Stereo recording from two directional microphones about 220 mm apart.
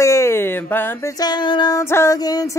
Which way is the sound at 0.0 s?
10° left (ahead or behind).